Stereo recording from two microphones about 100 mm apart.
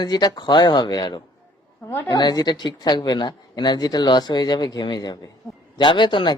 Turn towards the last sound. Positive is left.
turn(degrees=50)  # may be behind; listen again after turning